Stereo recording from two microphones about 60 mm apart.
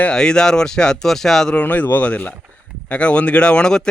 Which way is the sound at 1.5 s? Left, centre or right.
Left.